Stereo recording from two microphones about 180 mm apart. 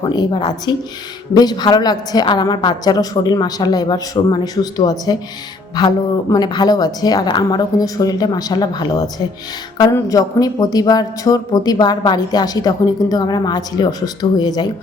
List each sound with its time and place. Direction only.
0.0 s speech: 25° left (ahead or behind)